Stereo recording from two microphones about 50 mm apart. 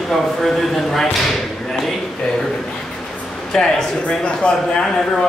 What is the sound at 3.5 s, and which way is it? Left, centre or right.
Speech, centre.